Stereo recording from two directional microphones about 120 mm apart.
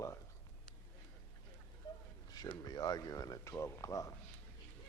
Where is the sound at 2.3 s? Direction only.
35° left (ahead or behind).